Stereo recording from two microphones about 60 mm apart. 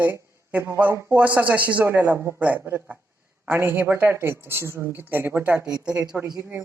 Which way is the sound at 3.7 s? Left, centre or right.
Right.